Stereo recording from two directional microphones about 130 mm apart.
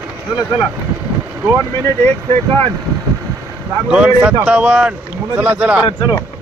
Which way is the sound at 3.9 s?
10° right (ahead or behind).